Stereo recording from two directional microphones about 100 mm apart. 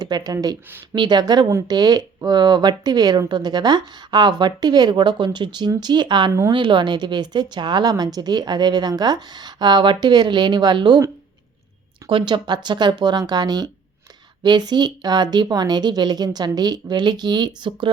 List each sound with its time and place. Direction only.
0.0 s speech: 40° right (ahead or behind)
12.0 s speech: 55° right (ahead or behind)